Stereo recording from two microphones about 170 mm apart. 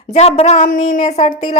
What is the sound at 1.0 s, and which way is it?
Speech, 35° left (ahead or behind).